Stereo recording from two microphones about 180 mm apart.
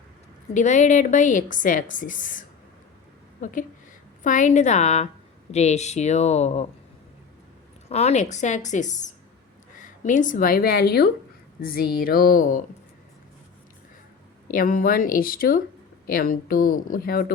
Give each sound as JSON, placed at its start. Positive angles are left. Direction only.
{"t": 0.5, "sound": "a woman's voice", "side_deg": 40}
{"t": 3.4, "sound": "a woman's voice", "side_deg": 45}
{"t": 7.9, "sound": "a woman's voice", "side_deg": 35}
{"t": 14.4, "sound": "a woman's voice", "side_deg": 50}